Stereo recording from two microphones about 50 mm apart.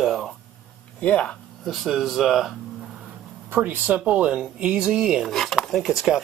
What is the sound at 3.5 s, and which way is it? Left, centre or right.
Speech, right.